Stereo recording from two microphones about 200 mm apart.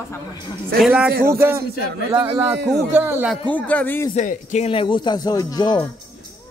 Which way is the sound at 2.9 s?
10° right (ahead or behind).